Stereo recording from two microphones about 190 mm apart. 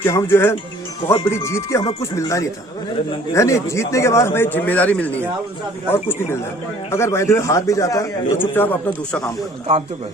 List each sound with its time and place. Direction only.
0.0 s a man's voice: 15° left (ahead or behind)